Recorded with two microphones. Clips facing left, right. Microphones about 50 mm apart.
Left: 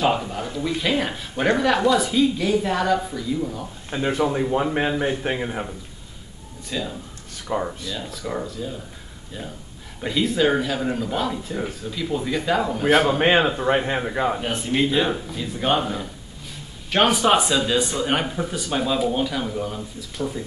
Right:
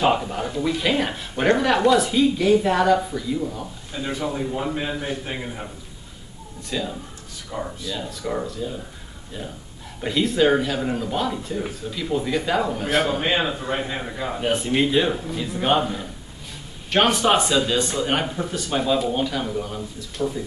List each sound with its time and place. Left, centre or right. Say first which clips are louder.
0.0 s a sound: right 1 dB; centre
0.6 s speech: right 1 dB; centre
3.9 s a man's voice: left 5 dB; left
6.7 s speech: right 1 dB; centre
7.5 s a man's voice: left 4 dB; centre
7.9 s speech: right 2 dB; centre
10.0 s speech: right 1 dB; centre
13.7 s speech: left 6 dB; left
14.4 s speech: right 2 dB; centre
15.8 s speech: even; centre